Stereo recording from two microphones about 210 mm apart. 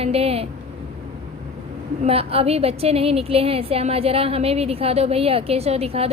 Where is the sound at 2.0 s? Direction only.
30° right (ahead or behind).